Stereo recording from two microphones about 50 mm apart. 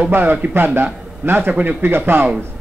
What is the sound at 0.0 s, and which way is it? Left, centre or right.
A man's voice, right.